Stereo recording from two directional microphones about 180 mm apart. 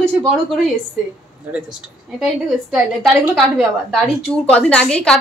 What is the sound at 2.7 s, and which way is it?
A woman's voice, centre (ahead or behind).